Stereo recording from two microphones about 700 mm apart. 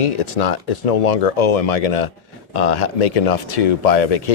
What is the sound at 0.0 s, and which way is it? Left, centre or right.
Speech, left.